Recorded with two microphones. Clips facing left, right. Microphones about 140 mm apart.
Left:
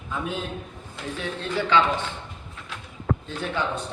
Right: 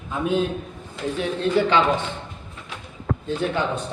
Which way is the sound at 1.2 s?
20° right (ahead or behind).